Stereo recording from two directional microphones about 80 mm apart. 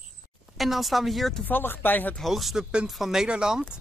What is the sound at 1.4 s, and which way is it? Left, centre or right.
Speech, left.